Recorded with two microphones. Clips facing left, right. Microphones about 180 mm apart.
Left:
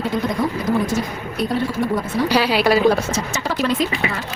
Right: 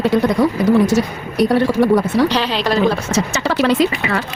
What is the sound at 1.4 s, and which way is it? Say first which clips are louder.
Speech: right 7 dB; 75° right (ahead or behind).